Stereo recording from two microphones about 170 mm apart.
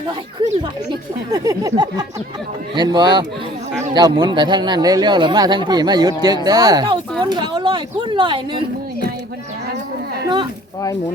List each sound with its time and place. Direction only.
0.9 s speech: 20° right (ahead or behind)